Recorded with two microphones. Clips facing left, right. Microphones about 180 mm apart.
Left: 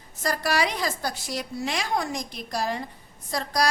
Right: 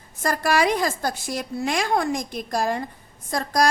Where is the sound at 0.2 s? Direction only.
50° right (ahead or behind).